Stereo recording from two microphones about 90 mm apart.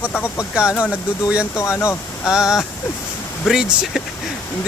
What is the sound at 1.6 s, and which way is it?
Speech, 30° left (ahead or behind).